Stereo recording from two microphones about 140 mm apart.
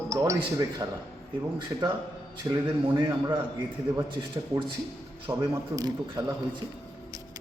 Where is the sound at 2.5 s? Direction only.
30° right (ahead or behind).